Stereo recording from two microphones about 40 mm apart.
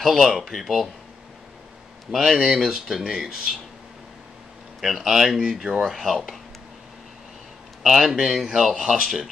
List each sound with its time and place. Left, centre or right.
0.0 s speech: centre
2.0 s speech: centre
2.3 s speech: centre
2.6 s speech: centre
4.7 s speech: centre
5.9 s speech: centre
7.8 s speech: centre
9.0 s speech: centre